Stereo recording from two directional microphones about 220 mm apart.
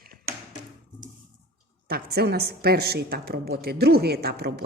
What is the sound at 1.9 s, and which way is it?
A woman's voice, 45° right (ahead or behind).